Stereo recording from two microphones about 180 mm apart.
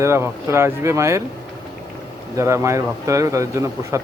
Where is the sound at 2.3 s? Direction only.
15° right (ahead or behind).